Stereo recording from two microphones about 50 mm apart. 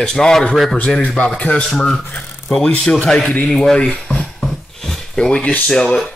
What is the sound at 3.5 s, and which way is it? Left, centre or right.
Drawer open or close, centre.